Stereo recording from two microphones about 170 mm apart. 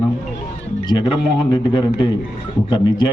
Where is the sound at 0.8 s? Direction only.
25° left (ahead or behind).